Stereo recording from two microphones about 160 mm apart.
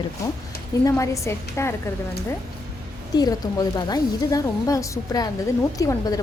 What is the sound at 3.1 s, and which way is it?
A woman's voice, 25° left (ahead or behind).